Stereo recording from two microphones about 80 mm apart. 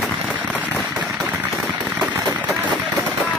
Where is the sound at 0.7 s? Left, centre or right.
Centre.